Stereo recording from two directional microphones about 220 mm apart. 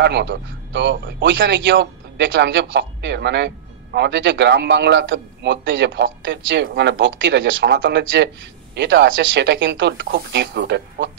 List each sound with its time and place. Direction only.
0.0 s a man's voice: 50° right (ahead or behind)